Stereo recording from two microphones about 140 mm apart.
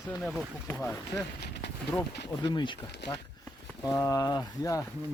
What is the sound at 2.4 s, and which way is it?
Speech, 35° left (ahead or behind).